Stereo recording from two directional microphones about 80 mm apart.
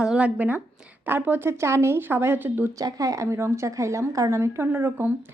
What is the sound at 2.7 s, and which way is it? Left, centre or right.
Speech, right.